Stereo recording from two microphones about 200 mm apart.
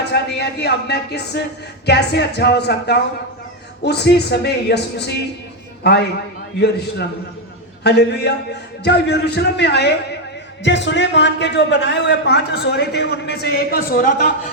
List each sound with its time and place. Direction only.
0.0 s a man's voice: 55° left (ahead or behind)